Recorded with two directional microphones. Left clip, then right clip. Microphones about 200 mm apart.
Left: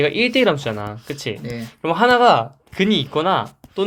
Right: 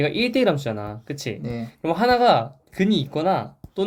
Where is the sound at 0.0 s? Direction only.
20° left (ahead or behind).